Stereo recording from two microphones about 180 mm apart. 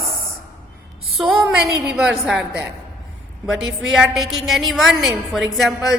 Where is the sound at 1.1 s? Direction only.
Centre (ahead or behind).